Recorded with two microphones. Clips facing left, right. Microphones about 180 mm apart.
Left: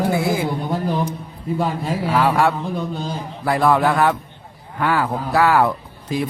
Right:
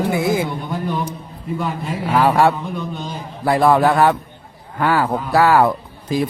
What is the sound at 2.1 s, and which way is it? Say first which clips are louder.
Speech: right 3 dB; 35° right (ahead or behind).